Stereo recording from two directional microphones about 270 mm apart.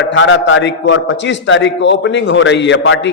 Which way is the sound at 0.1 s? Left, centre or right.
Left.